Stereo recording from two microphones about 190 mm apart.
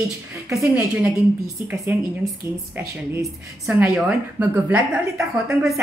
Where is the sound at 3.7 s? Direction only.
5° right (ahead or behind).